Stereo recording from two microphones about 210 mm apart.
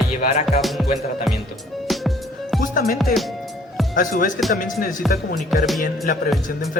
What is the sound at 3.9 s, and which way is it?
Speech, 40° left (ahead or behind).